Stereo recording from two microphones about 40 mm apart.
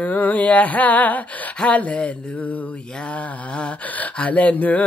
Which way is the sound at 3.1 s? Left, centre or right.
Left.